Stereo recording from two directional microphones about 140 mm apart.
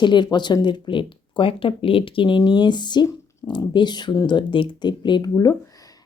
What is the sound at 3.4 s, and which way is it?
Speech, 20° left (ahead or behind).